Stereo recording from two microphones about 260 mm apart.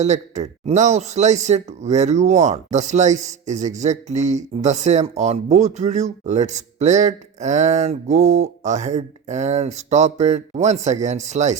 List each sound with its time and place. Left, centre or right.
0.0 s speech: right